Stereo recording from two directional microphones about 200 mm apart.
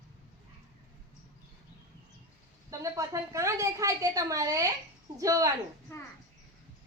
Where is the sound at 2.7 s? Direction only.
15° right (ahead or behind).